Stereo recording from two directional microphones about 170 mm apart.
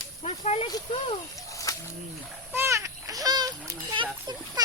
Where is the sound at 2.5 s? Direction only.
15° right (ahead or behind).